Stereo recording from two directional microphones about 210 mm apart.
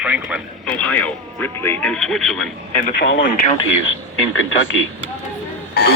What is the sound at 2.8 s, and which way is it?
Speech, 50° left (ahead or behind).